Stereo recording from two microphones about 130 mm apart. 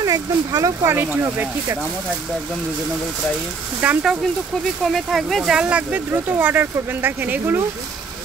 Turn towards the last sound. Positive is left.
turn(degrees=-15)  # may be behind; listen again after turning